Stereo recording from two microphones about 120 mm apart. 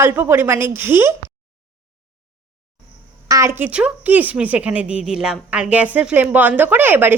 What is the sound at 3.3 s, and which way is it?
A woman's voice, 25° right (ahead or behind).